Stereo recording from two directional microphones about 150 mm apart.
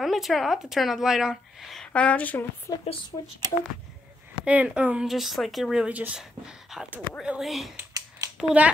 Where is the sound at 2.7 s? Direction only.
25° left (ahead or behind).